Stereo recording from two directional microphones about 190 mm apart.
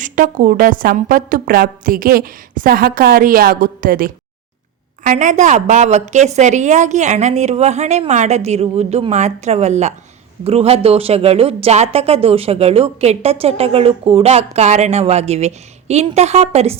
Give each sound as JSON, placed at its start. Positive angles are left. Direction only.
{"t": 0.0, "sound": "a woman's voice", "side_deg": -45}